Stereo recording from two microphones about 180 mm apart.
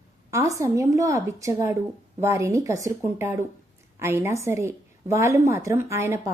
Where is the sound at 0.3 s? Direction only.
15° right (ahead or behind).